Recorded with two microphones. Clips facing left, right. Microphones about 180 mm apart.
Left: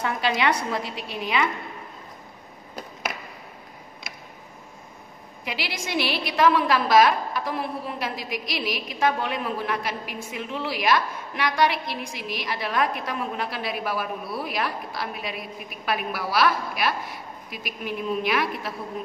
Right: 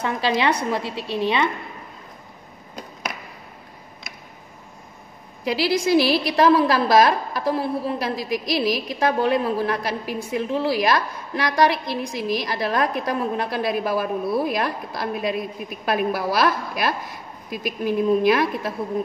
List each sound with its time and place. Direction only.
0.0 s a woman's voice: 25° right (ahead or behind)
5.4 s a woman's voice: 35° right (ahead or behind)